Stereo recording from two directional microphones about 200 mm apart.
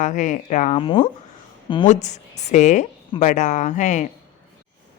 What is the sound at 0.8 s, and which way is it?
Speech, 25° left (ahead or behind).